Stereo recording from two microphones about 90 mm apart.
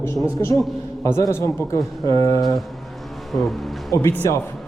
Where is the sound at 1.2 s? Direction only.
30° left (ahead or behind).